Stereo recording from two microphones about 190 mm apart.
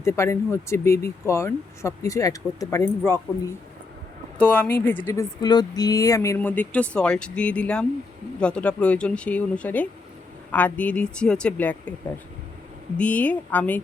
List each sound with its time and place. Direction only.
0.0 s speech: 15° left (ahead or behind)
4.4 s speech: 5° left (ahead or behind)
13.0 s speech: 5° left (ahead or behind)